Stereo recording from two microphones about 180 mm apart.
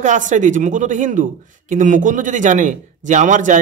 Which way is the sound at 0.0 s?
45° right (ahead or behind).